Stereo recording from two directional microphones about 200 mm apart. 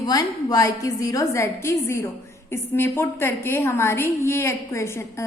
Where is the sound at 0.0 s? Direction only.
20° left (ahead or behind).